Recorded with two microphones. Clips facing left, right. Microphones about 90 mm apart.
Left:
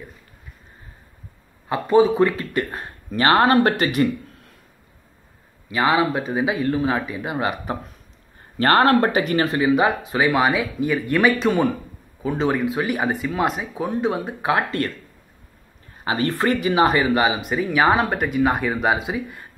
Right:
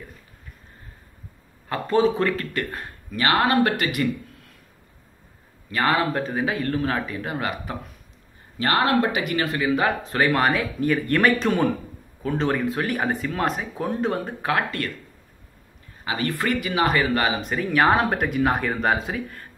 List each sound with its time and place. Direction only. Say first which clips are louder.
1.7 s speech: left 4 dB; 15° left (ahead or behind)
3.1 s speech: left 5 dB; 35° left (ahead or behind)
5.7 s speech: left 3 dB; 10° left (ahead or behind)
8.5 s speech: left 5 dB; 45° left (ahead or behind); by 9.9 s 20° left (ahead or behind)
10.0 s speech: left 2 dB; 5° left (ahead or behind)
14.4 s speech: left 5 dB; 25° left (ahead or behind)
16.0 s speech: left 4 dB; 30° left (ahead or behind); by 19.4 s 10° left (ahead or behind)